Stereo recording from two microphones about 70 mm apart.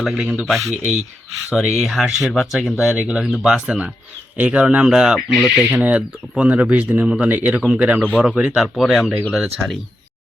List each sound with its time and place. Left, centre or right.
0.1 s speech: centre
0.4 s speech: centre